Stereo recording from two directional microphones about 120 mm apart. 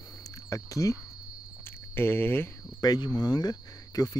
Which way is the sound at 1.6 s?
20° left (ahead or behind).